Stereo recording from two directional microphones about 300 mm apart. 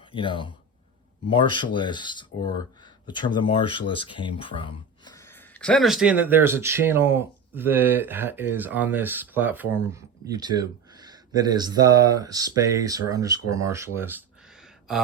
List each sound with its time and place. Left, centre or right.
0.1 s speech: centre